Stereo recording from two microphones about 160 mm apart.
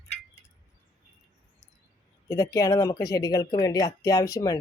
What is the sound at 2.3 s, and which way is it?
Speech, 20° left (ahead or behind).